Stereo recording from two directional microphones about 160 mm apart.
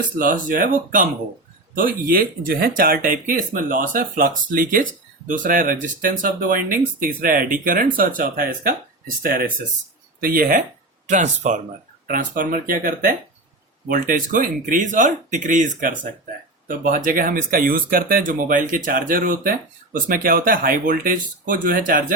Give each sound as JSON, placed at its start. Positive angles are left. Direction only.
{"t": 0.2, "sound": "speech", "side_deg": -55}
{"t": 11.0, "sound": "speech", "side_deg": -50}
{"t": 12.0, "sound": "speech", "side_deg": -60}